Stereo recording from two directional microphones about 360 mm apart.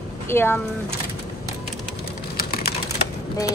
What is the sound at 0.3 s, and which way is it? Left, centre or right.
Speech, centre.